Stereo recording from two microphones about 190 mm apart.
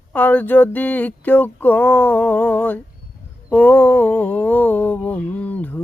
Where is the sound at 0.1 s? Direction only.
10° left (ahead or behind).